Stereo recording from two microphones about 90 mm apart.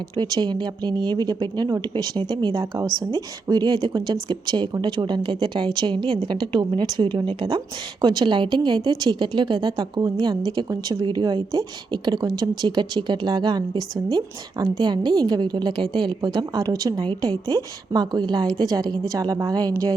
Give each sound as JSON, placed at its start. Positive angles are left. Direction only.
{"t": 0.2, "sound": "a woman's voice", "side_deg": -55}
{"t": 11.0, "sound": "a woman's voice", "side_deg": -55}